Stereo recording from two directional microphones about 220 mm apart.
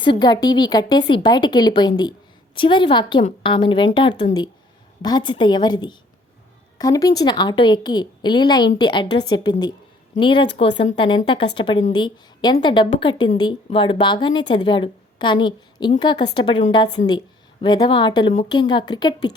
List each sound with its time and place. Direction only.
0.0 s a woman's voice: 20° left (ahead or behind)